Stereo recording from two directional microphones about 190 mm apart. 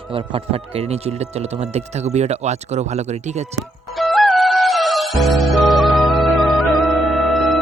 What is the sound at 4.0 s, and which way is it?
Music, centre (ahead or behind).